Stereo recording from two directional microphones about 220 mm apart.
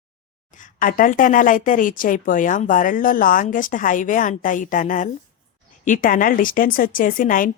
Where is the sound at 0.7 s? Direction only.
40° left (ahead or behind).